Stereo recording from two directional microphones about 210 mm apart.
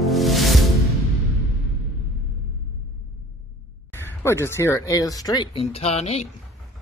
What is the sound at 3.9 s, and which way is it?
Speech, 10° left (ahead or behind).